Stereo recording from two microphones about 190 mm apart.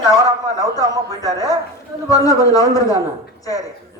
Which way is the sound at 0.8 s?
20° left (ahead or behind).